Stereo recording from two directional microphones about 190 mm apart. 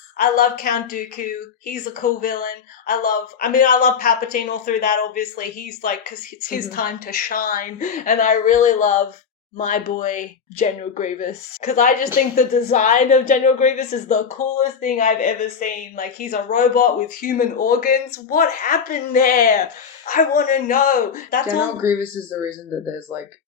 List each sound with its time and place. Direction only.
0.2 s speech: 50° left (ahead or behind)